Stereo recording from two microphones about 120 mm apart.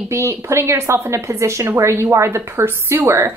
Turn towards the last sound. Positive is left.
turn(degrees=-20)  # may be behind; listen again after turning